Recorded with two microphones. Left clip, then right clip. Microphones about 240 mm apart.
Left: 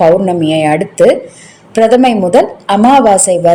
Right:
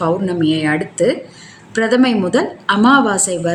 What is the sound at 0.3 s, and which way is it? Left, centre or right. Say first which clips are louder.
A woman's voice: left 6 dB; centre.